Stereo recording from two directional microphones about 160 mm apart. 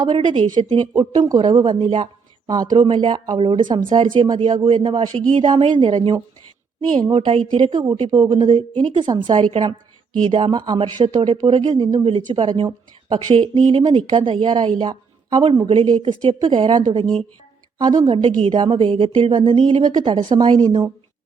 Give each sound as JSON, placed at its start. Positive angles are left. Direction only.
{"t": 0.0, "sound": "a woman's voice", "side_deg": -30}